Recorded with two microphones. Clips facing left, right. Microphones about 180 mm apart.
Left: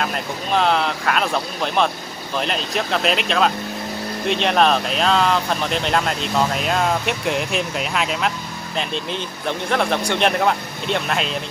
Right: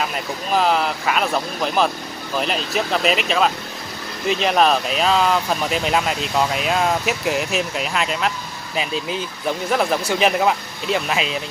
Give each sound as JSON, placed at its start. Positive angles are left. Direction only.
{"t": 0.0, "sound": "speech", "side_deg": -5}